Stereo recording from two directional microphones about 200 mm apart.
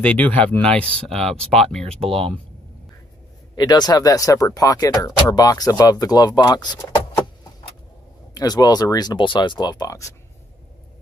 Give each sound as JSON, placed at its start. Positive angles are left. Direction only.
{"t": 0.0, "sound": "speech", "side_deg": 5}
{"t": 2.0, "sound": "speech", "side_deg": -30}
{"t": 3.5, "sound": "speech", "side_deg": 20}
{"t": 8.4, "sound": "speech", "side_deg": 20}